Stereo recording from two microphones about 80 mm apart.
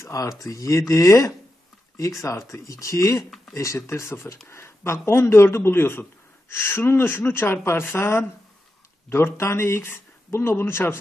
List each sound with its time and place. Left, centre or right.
0.0 s speech: left